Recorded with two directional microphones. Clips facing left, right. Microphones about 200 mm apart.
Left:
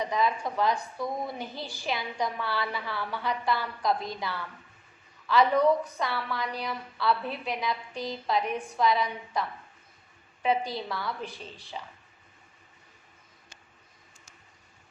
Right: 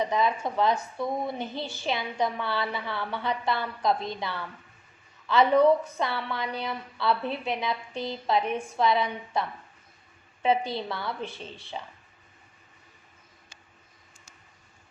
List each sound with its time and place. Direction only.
0.0 s a woman's voice: 25° right (ahead or behind)
10.4 s a woman's voice: 25° right (ahead or behind)